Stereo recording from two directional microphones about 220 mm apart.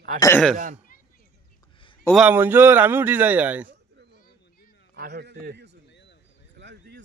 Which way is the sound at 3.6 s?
50° right (ahead or behind).